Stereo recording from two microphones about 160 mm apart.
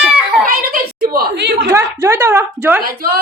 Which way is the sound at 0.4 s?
65° right (ahead or behind).